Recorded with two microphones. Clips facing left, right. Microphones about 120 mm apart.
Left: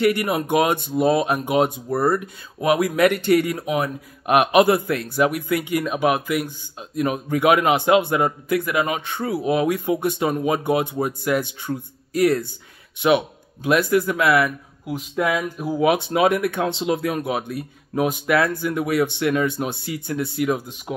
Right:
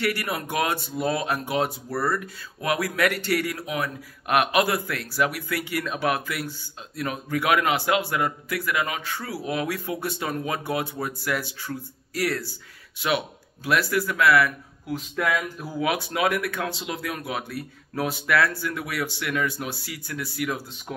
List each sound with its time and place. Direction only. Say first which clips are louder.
0.0 s speech: left 8 dB; 20° left (ahead or behind)